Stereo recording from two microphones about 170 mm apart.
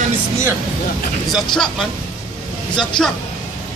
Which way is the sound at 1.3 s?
Centre (ahead or behind).